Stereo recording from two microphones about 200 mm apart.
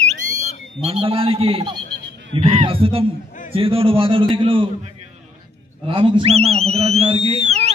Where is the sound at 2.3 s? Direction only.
35° right (ahead or behind).